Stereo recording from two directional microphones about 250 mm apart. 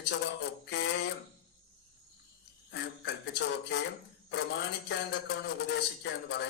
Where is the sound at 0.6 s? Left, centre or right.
Left.